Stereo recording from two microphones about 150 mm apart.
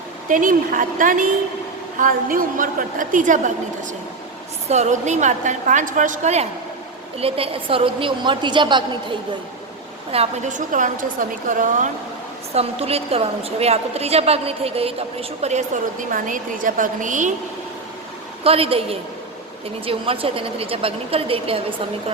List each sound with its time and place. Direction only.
0.3 s a woman's voice: 60° right (ahead or behind)
4.7 s a woman's voice: 50° right (ahead or behind); by 9.1 s 30° right (ahead or behind)
10.1 s a woman's voice: 45° right (ahead or behind)
12.5 s a woman's voice: 40° right (ahead or behind)
18.4 s a woman's voice: 40° right (ahead or behind)